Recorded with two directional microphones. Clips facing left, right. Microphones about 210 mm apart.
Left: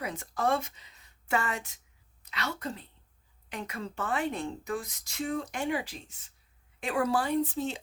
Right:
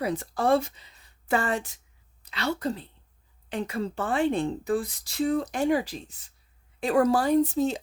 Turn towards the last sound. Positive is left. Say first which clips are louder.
# right 7 dB
turn(degrees=-40)  # may be behind; listen again after turning